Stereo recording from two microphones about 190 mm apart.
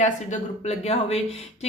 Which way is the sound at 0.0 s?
35° left (ahead or behind).